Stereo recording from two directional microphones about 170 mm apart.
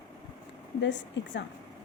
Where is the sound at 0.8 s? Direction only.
90° left.